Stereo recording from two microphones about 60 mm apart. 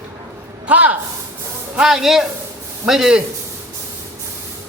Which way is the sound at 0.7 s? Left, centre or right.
Right.